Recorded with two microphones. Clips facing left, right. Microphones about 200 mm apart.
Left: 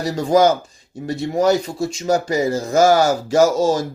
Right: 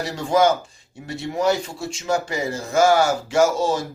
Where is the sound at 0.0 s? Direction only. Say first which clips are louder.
Left 4 dB; 40° left (ahead or behind).